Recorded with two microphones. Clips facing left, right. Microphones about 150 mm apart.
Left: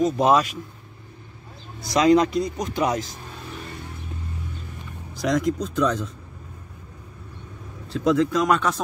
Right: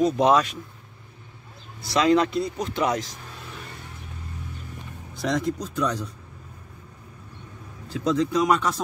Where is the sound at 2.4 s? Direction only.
15° left (ahead or behind).